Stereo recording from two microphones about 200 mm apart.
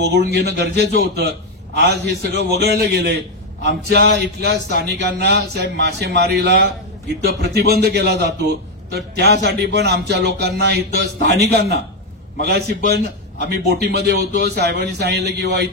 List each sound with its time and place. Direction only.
0.0 s a man's voice: 55° right (ahead or behind)
4.4 s a man's voice: 60° right (ahead or behind)